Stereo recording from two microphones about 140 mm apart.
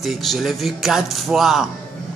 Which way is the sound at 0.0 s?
Centre (ahead or behind).